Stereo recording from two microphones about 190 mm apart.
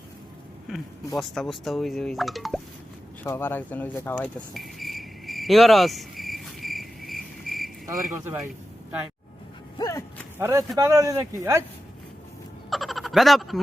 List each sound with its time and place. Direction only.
0.7 s speech: centre (ahead or behind)
3.2 s speech: 10° left (ahead or behind)
4.5 s cricket: centre (ahead or behind)
8.2 s speech: 15° right (ahead or behind)
9.7 s a sound: 20° left (ahead or behind)
10.3 s speech: 15° right (ahead or behind)
12.7 s frog: centre (ahead or behind)